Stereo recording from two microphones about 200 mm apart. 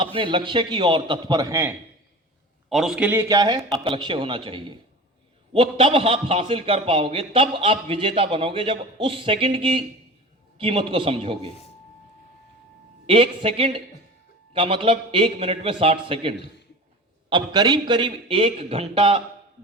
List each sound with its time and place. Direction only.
0.2 s a man's voice: 25° right (ahead or behind)
2.6 s a man's voice: centre (ahead or behind); by 11.5 s 30° right (ahead or behind)
13.1 s a man's voice: 25° right (ahead or behind)